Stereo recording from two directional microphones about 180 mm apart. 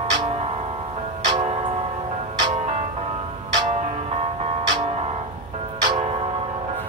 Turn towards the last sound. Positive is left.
turn(degrees=-35)  # may be behind; listen again after turning